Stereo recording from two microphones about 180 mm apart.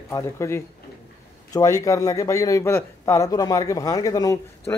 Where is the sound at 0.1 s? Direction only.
15° left (ahead or behind).